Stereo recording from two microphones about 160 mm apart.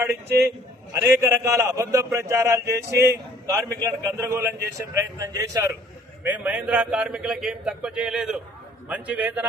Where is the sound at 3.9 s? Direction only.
15° right (ahead or behind).